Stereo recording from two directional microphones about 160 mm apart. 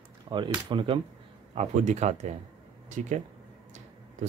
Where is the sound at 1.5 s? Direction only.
45° right (ahead or behind).